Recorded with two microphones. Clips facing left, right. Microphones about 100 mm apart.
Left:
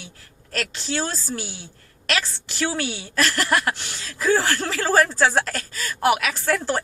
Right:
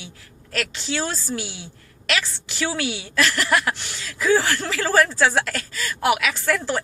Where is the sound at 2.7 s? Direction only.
35° left (ahead or behind).